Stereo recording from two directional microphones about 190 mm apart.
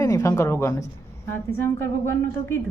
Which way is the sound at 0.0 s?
15° left (ahead or behind).